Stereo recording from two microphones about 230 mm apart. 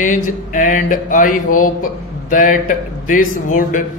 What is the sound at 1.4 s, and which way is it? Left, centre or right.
Speech, left.